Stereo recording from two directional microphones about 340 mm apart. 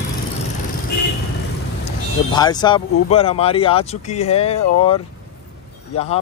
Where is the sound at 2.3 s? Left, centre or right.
Centre.